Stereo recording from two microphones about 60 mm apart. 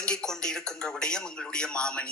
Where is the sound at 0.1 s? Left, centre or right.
Centre.